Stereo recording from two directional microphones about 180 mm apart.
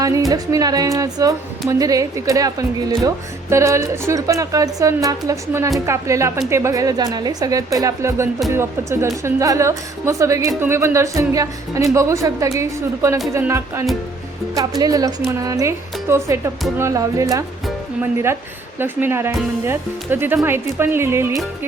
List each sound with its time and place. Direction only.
0.3 s a woman's voice: 20° right (ahead or behind)